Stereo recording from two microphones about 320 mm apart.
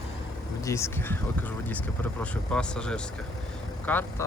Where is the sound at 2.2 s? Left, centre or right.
Centre.